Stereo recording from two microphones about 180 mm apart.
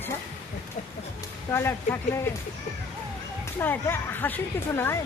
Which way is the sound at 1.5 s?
15° left (ahead or behind).